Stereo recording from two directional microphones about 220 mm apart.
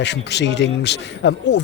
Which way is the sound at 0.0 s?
50° left (ahead or behind).